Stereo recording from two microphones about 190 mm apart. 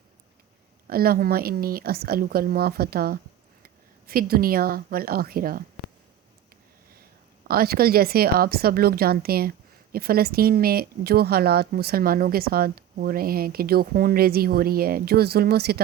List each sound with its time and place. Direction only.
0.9 s speech: 50° right (ahead or behind)
7.4 s speech: 50° right (ahead or behind)